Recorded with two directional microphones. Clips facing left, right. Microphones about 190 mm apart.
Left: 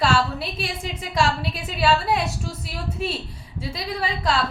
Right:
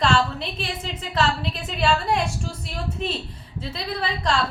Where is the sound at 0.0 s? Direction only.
10° left (ahead or behind).